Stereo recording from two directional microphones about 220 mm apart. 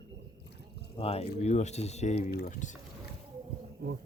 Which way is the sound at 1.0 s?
25° left (ahead or behind).